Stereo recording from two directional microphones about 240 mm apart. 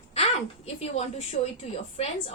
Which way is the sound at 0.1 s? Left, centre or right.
Left.